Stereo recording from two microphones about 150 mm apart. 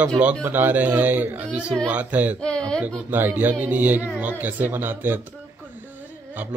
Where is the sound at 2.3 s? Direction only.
5° left (ahead or behind).